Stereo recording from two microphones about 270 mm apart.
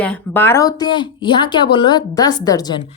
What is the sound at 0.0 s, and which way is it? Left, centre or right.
A woman's voice, centre.